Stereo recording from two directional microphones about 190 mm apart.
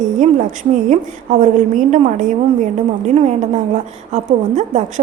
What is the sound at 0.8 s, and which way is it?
A woman's voice, 40° right (ahead or behind).